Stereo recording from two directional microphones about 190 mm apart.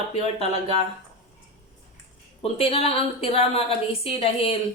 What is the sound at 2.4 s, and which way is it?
A woman's voice, 30° left (ahead or behind).